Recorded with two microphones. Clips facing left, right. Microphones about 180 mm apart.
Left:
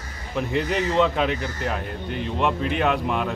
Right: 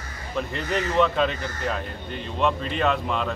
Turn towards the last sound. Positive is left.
turn(degrees=10)  # may be behind; listen again after turning